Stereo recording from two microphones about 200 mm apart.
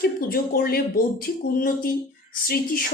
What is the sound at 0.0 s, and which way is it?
Speech, 50° left (ahead or behind).